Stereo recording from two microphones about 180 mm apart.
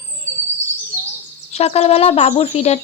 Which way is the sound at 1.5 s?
35° left (ahead or behind).